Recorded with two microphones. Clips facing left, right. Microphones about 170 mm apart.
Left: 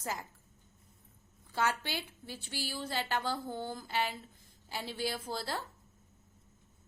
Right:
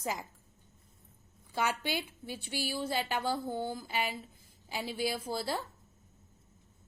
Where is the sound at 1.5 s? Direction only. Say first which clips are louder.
Right 1 dB; 15° right (ahead or behind).